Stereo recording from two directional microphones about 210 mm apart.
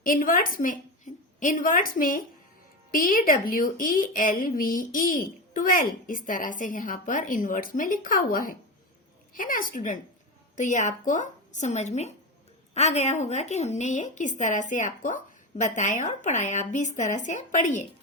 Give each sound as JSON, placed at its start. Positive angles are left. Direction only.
{"t": 0.0, "sound": "a woman's voice", "side_deg": 40}